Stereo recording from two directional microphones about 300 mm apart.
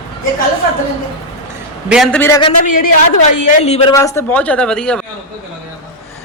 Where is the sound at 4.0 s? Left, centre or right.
Centre.